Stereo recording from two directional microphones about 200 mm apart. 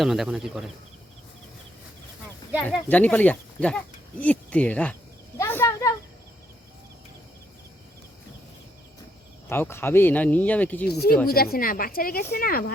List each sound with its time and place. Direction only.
0.0 s speech: centre (ahead or behind)
2.9 s speech: 10° left (ahead or behind)
5.4 s a sound: 10° left (ahead or behind)
9.5 s speech: 10° left (ahead or behind)
10.8 s speech: 50° left (ahead or behind)